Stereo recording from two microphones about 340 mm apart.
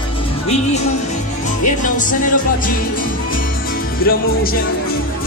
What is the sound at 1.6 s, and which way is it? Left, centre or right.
Music, left.